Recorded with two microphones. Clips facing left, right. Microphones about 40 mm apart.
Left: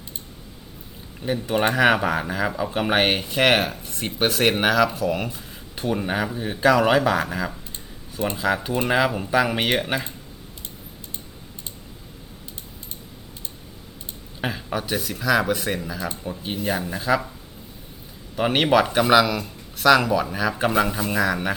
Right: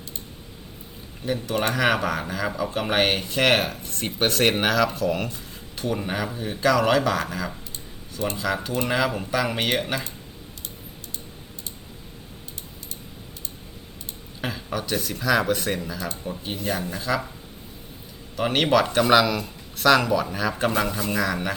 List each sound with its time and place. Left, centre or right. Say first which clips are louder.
1.2 s speech: left 3 dB; centre
14.4 s speech: left 2 dB; centre
18.3 s speech: left 2 dB; centre